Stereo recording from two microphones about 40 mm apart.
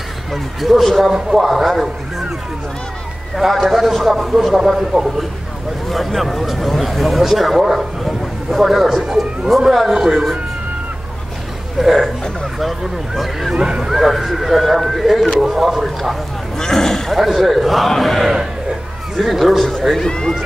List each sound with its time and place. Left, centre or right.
0.3 s a man's voice: centre
1.1 s speech: centre
1.5 s a man's voice: centre
3.3 s a man's voice: centre
5.9 s a man's voice: centre
9.0 s speech: centre
11.8 s a man's voice: centre
13.6 s speech: centre
13.9 s a man's voice: centre
16.5 s a man's voice: centre
20.1 s speech: centre